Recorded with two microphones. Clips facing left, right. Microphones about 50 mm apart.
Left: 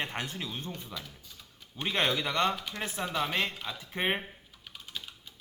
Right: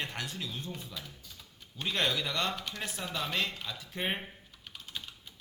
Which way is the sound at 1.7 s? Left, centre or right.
Left.